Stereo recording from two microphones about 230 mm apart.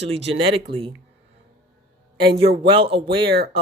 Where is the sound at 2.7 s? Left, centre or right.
Right.